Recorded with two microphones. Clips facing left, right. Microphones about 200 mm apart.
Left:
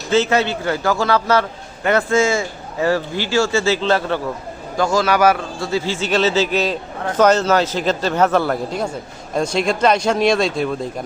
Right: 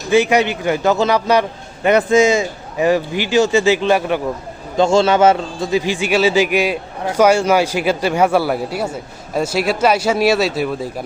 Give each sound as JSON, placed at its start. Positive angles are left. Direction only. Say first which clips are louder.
{"t": 0.1, "sound": "a man's voice", "louder": "right 3 dB", "side_deg": -15}
{"t": 4.8, "sound": "a man's voice", "louder": "right 4 dB", "side_deg": -25}